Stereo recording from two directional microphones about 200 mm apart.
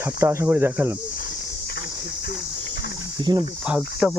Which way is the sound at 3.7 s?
5° right (ahead or behind).